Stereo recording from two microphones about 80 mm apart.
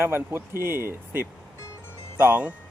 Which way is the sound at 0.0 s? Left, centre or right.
Right.